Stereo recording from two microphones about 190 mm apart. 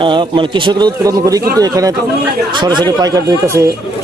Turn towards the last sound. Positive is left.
turn(degrees=-15)  # may be behind; listen again after turning